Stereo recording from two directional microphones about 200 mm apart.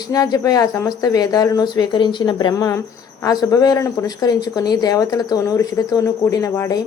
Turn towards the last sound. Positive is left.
turn(degrees=15)  # may be behind; listen again after turning